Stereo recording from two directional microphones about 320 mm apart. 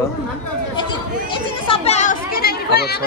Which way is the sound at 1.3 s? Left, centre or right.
Centre.